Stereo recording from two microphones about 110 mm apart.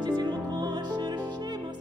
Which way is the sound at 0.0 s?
40° right (ahead or behind).